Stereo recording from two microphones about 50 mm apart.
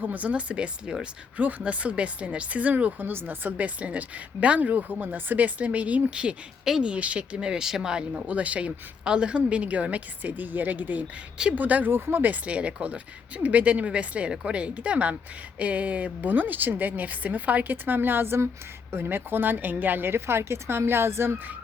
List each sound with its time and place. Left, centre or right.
0.0 s speech: right
1.4 s speech: right; by 8.0 s centre
8.1 s speech: right
11.9 s a woman's voice: right
12.3 s a woman's voice: right